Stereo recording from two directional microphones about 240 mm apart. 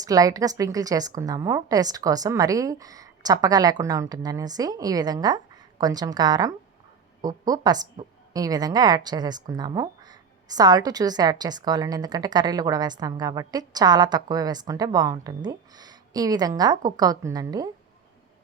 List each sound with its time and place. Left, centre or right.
0.0 s a woman's voice: centre